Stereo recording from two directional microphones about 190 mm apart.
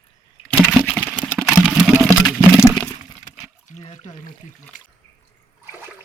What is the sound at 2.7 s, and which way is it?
Crack, 15° right (ahead or behind).